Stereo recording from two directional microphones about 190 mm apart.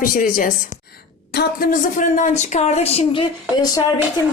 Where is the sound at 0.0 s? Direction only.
45° left (ahead or behind).